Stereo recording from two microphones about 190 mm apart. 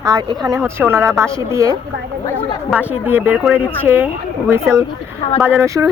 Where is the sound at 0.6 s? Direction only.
10° right (ahead or behind).